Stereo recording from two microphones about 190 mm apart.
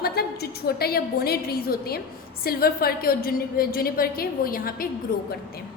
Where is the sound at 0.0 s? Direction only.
55° left (ahead or behind).